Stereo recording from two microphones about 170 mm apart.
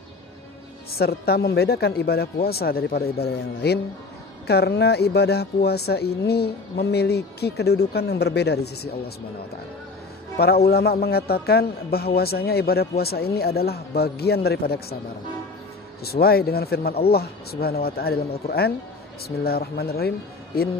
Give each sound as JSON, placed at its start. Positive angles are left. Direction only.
{"t": 0.9, "sound": "a man's voice", "side_deg": 65}
{"t": 10.3, "sound": "a man's voice", "side_deg": 65}
{"t": 16.0, "sound": "a man's voice", "side_deg": 65}